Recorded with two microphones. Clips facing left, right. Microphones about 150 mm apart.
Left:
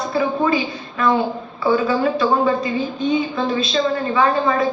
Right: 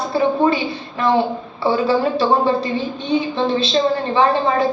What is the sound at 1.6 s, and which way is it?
A woman's voice, 30° right (ahead or behind).